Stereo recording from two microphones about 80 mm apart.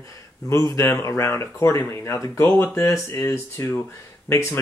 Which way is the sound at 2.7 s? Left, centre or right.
Left.